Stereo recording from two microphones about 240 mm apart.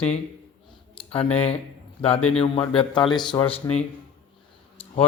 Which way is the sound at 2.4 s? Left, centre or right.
Left.